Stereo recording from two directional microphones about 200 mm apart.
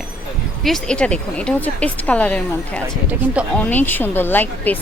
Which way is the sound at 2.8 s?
10° right (ahead or behind).